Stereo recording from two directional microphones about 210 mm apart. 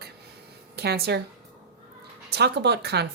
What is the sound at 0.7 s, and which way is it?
Speech, 50° right (ahead or behind).